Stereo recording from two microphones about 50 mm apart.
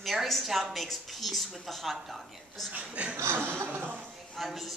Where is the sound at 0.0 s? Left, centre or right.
Centre.